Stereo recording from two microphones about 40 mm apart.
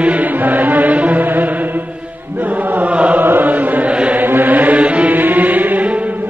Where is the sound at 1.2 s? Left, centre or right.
Right.